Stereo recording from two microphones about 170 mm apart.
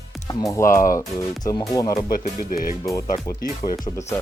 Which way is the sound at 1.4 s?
20° left (ahead or behind).